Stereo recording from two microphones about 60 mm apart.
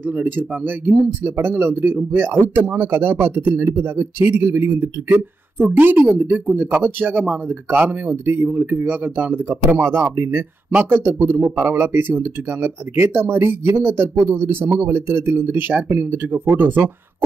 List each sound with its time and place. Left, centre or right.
0.0 s speech: right